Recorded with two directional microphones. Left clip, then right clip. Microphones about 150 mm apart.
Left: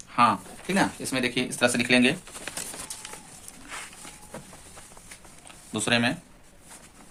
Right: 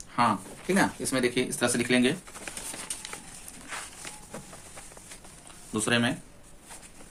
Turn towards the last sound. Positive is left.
turn(degrees=15)  # may be behind; listen again after turning